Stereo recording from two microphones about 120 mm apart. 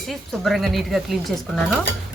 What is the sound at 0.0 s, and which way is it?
Speech, centre (ahead or behind).